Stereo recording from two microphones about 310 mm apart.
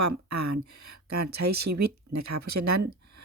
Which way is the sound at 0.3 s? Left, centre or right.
Right.